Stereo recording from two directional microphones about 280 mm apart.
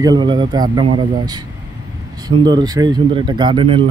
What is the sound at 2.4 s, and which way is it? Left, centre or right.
Speech, centre.